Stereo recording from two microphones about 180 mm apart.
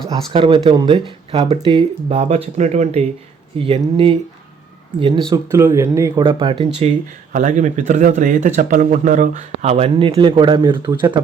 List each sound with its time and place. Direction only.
0.3 s speech: 30° right (ahead or behind)
5.3 s speech: 15° right (ahead or behind)
7.3 s speech: 45° right (ahead or behind); by 11.2 s 25° right (ahead or behind)